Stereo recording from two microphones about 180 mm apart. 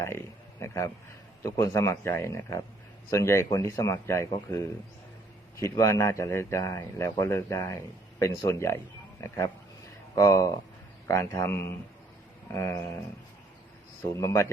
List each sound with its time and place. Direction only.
0.6 s a sound: 15° left (ahead or behind)
1.4 s speech: 15° left (ahead or behind)
14.2 s speech: 15° left (ahead or behind)